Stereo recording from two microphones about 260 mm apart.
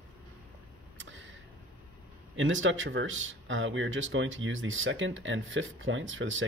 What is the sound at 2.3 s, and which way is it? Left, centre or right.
Speech, right.